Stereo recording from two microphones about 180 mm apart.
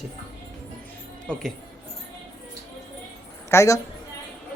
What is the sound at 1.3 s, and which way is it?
Speech, 5° left (ahead or behind).